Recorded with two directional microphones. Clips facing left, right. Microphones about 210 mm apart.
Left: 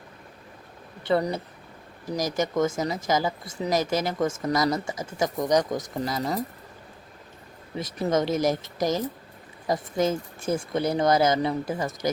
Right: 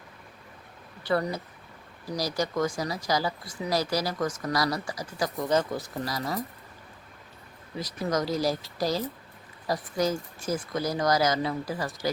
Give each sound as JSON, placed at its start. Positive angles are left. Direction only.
{"t": 1.1, "sound": "speech", "side_deg": 25}
{"t": 7.8, "sound": "speech", "side_deg": 25}